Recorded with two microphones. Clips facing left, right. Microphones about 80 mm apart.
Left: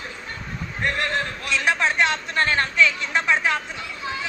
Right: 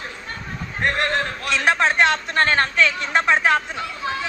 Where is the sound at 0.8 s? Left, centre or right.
Right.